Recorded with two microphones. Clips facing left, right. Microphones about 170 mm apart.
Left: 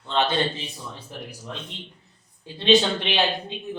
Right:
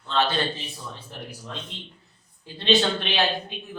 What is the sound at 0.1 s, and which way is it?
Speech, 20° left (ahead or behind).